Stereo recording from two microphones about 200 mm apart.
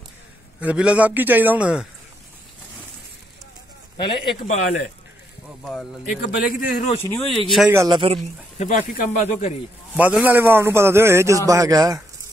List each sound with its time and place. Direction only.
0.6 s a man's voice: 5° right (ahead or behind)
3.9 s a man's voice: 25° left (ahead or behind)
6.2 s a man's voice: 45° left (ahead or behind)
7.2 s speech: centre (ahead or behind)
7.7 s a man's voice: 15° right (ahead or behind)
8.5 s a man's voice: 40° left (ahead or behind)
9.9 s a man's voice: 10° right (ahead or behind)